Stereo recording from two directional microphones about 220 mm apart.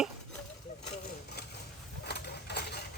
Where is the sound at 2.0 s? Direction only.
50° left (ahead or behind).